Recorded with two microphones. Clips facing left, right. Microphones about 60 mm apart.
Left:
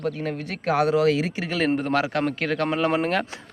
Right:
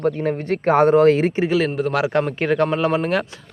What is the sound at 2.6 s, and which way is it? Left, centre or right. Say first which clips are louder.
Speech: right 3 dB; centre.